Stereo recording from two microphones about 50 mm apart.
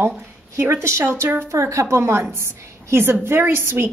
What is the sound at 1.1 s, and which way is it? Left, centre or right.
Speech, right.